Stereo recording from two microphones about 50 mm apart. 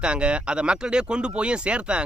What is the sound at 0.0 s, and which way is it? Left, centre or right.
Speech, right.